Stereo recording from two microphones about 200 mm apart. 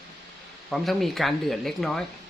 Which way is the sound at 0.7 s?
Centre (ahead or behind).